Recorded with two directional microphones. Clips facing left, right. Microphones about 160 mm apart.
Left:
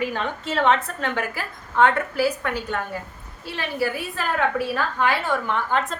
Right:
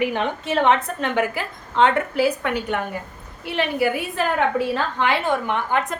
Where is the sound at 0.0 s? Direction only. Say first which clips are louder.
Right 4 dB; 20° right (ahead or behind).